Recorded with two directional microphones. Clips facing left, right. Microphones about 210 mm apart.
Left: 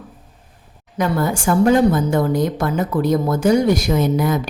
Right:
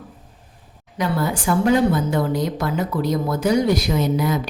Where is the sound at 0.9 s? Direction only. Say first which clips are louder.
Left 3 dB; 45° left (ahead or behind).